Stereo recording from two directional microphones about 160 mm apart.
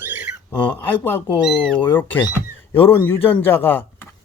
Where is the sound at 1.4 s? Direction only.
5° left (ahead or behind).